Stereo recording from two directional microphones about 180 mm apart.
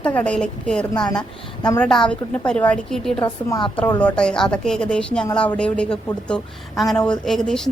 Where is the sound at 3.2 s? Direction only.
25° left (ahead or behind).